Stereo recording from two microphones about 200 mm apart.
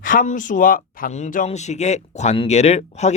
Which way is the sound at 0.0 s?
45° left (ahead or behind).